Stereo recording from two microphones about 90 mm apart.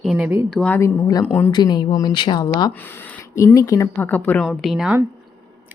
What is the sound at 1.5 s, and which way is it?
Speech, 50° left (ahead or behind).